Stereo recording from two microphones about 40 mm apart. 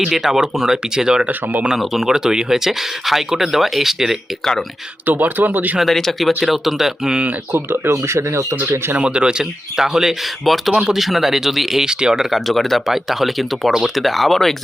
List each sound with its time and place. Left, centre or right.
0.0 s speech: centre
1.7 s speech: centre
5.0 s speech: right
5.8 s speech: centre
7.5 s speech: right
9.0 s speech: right
9.7 s speech: centre
10.7 s speech: right
10.9 s speech: centre
11.9 s speech: centre
12.2 s speech: centre
12.8 s speech: centre